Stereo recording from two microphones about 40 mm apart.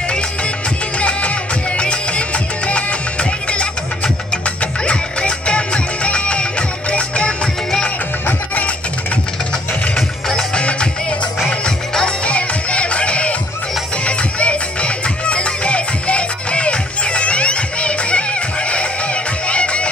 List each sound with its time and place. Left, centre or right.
0.9 s music: left
10.3 s music: left
11.6 s music: centre
12.3 s music: left